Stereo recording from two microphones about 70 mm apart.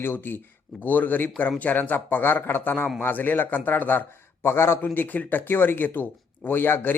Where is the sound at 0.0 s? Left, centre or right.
Left.